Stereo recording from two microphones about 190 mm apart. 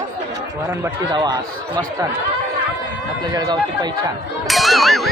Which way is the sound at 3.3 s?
20° right (ahead or behind).